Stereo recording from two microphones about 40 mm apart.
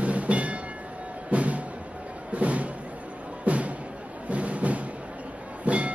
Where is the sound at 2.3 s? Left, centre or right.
Right.